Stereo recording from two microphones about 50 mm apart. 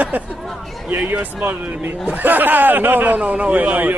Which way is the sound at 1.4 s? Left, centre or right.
Right.